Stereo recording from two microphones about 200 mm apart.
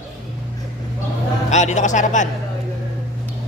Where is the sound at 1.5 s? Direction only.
35° left (ahead or behind).